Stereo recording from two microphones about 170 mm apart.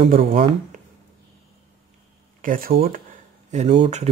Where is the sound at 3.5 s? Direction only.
45° right (ahead or behind).